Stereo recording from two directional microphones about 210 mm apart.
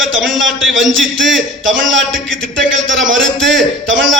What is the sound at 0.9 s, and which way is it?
Speech, centre (ahead or behind).